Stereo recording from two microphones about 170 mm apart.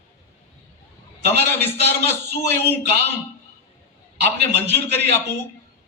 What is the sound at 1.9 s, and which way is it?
Speech, 15° left (ahead or behind).